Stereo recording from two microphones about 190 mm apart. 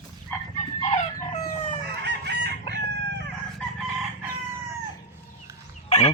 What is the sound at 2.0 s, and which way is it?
Chicken, 60° right (ahead or behind).